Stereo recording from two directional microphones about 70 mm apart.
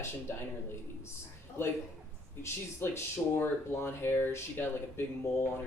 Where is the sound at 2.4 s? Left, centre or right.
Left.